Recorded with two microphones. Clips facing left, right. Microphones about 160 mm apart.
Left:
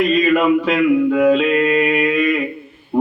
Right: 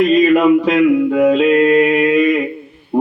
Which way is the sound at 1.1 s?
15° right (ahead or behind).